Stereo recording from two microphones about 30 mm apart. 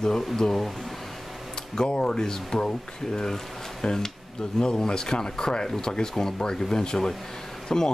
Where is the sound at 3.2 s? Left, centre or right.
Centre.